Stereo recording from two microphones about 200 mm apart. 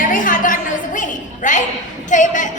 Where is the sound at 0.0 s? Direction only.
40° left (ahead or behind).